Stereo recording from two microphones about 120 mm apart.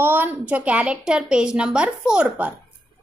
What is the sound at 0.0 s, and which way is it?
A woman's voice, 15° right (ahead or behind).